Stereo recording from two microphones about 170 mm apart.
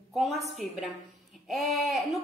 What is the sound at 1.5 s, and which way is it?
Speech, centre (ahead or behind).